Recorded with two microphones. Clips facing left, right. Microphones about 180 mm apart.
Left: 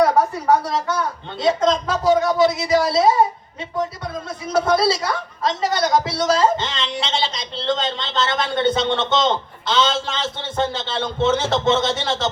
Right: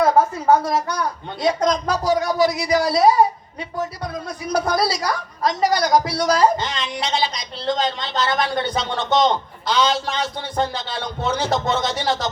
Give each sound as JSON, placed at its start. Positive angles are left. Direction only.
{"t": 0.9, "sound": "speech", "side_deg": 25}